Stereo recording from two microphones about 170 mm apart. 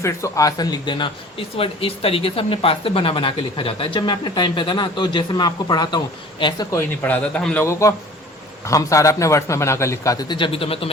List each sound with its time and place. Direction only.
0.0 s a man's voice: 20° left (ahead or behind)